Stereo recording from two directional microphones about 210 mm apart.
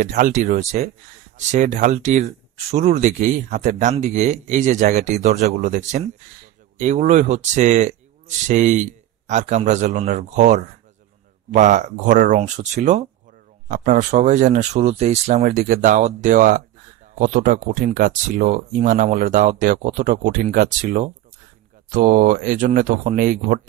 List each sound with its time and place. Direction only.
0.0 s speech: 35° right (ahead or behind)
15.4 s speech: 45° right (ahead or behind)